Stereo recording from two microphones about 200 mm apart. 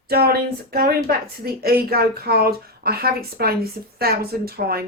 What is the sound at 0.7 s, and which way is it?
A woman's voice, 50° right (ahead or behind).